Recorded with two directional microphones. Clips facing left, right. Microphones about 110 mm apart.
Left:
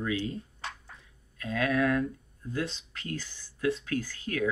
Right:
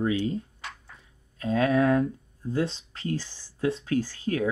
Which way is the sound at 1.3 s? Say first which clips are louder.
Right 5 dB; 30° right (ahead or behind).